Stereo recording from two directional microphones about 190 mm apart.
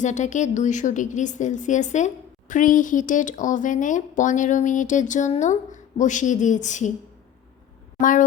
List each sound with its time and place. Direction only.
0.0 s a woman's voice: 40° left (ahead or behind)
7.9 s speech: 45° left (ahead or behind)